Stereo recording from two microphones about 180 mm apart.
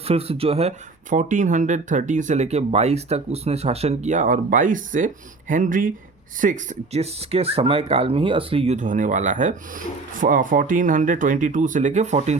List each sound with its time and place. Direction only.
0.1 s speech: 35° right (ahead or behind)
1.1 s speech: 45° right (ahead or behind)